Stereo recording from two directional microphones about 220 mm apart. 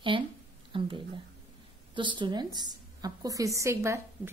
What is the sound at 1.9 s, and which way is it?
A woman's voice, 20° right (ahead or behind).